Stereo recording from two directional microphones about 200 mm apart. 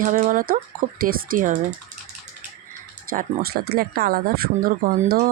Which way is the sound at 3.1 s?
45° right (ahead or behind).